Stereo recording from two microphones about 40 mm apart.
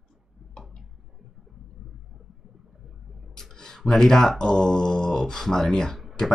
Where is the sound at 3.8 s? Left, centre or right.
Centre.